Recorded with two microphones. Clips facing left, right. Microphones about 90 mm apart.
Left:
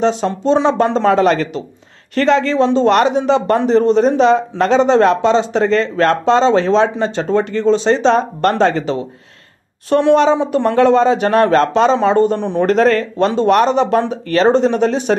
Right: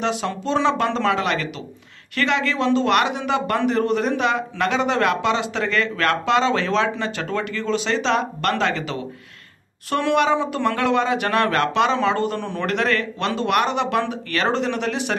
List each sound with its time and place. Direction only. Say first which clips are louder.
0.0 s a man's voice: left 8 dB; 30° left (ahead or behind)